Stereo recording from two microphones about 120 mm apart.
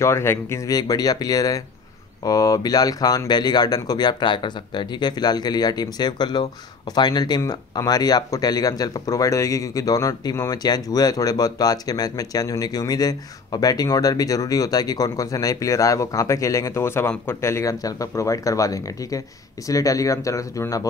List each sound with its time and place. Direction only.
0.0 s speech: 20° left (ahead or behind)
0.7 s speech: 35° left (ahead or behind)